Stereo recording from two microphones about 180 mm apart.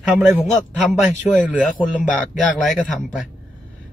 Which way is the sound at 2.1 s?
Centre (ahead or behind).